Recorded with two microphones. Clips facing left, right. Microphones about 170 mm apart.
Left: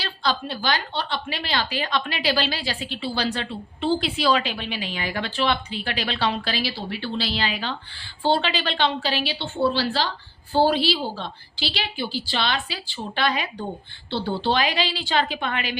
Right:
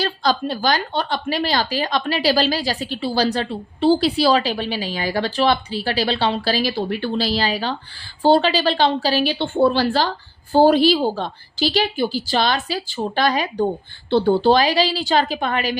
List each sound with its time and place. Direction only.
0.0 s a woman's voice: 40° right (ahead or behind)